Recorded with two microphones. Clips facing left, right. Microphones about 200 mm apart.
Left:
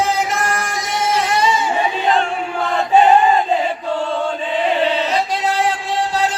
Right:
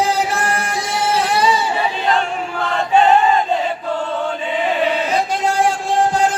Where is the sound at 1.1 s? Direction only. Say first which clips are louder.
Even; 5° right (ahead or behind).